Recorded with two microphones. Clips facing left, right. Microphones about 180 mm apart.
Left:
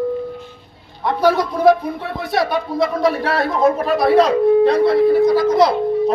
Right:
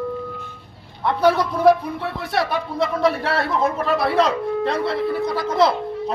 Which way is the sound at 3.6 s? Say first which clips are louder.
Left 8 dB; 45° left (ahead or behind).